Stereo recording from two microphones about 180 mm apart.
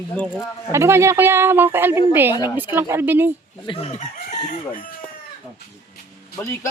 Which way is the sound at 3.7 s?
35° left (ahead or behind).